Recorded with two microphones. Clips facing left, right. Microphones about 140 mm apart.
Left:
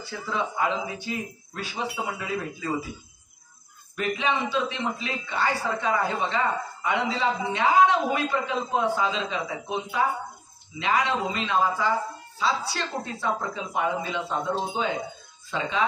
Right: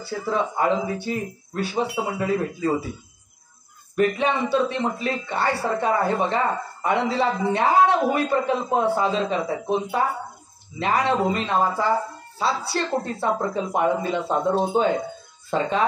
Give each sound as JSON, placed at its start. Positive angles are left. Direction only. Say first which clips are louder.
{"t": 0.3, "sound": "speech", "louder": "right 5 dB", "side_deg": -45}
{"t": 3.9, "sound": "speech", "louder": "right 6 dB", "side_deg": -45}